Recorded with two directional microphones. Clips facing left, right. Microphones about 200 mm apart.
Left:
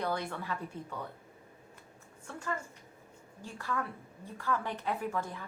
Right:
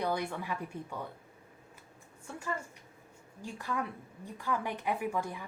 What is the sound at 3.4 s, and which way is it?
A woman's voice, 15° right (ahead or behind).